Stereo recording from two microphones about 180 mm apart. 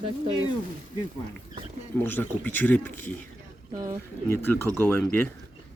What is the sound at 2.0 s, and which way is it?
Speech, 10° left (ahead or behind).